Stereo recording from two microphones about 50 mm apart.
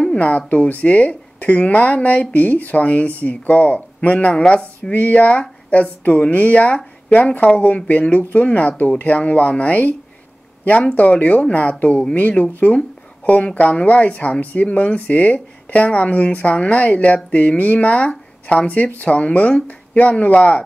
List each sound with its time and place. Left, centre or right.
0.0 s speech: left
4.4 s speech: centre
4.9 s speech: left